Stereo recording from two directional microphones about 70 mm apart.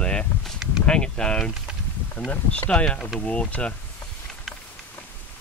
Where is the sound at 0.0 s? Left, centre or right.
Centre.